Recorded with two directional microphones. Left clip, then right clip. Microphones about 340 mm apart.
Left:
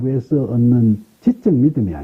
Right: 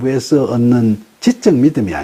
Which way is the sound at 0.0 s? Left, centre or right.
Centre.